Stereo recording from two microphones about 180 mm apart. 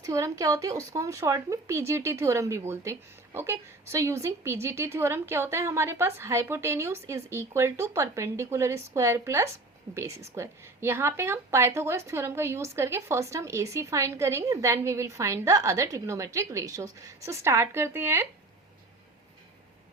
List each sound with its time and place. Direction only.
0.0 s a woman's voice: 20° right (ahead or behind)